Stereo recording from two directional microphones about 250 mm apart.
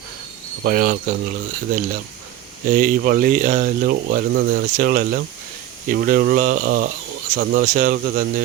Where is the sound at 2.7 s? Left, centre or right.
Right.